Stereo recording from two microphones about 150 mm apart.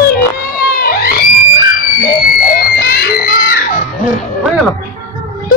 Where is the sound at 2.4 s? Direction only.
85° left.